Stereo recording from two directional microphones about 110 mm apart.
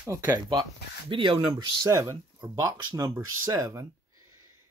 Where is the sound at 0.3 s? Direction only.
40° right (ahead or behind).